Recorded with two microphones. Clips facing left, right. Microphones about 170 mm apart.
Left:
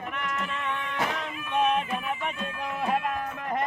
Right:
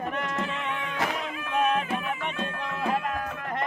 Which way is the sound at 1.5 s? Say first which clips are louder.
Even; centre (ahead or behind).